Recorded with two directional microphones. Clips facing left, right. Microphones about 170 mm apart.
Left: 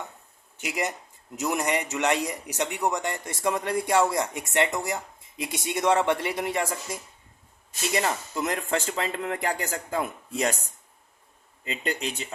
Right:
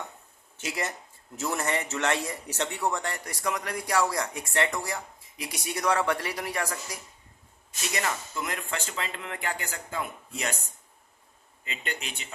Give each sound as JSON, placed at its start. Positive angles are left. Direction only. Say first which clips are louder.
{"t": 0.5, "sound": "a man's voice", "louder": "left 3 dB", "side_deg": 15}
{"t": 7.9, "sound": "speech", "louder": "left 4 dB", "side_deg": 35}
{"t": 11.6, "sound": "speech", "louder": "left 7 dB", "side_deg": 40}